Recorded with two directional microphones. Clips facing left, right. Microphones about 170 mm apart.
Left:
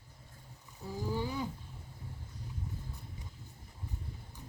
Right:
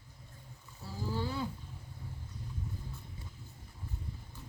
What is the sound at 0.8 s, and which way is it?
Wild animals, 15° left (ahead or behind).